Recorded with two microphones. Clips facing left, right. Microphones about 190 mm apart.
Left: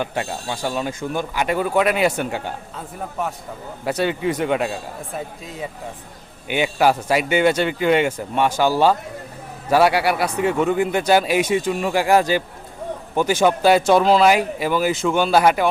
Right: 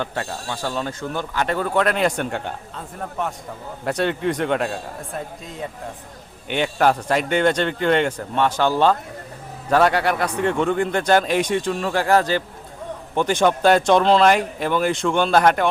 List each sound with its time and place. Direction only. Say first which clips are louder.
0.0 s speech: left 2 dB; 15° left (ahead or behind)